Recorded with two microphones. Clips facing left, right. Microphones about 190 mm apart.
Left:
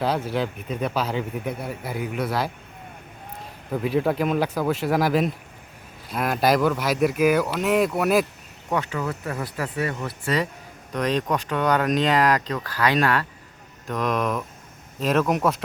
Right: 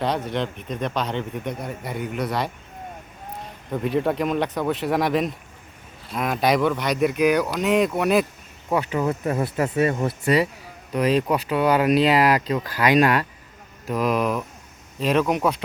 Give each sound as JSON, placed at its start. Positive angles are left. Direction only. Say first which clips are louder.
{"t": 0.0, "sound": "speech", "louder": "even", "side_deg": 5}
{"t": 3.7, "sound": "speech", "louder": "even", "side_deg": 0}
{"t": 8.7, "sound": "speech", "louder": "right 4 dB", "side_deg": -15}
{"t": 10.9, "sound": "speech", "louder": "right 3 dB", "side_deg": -10}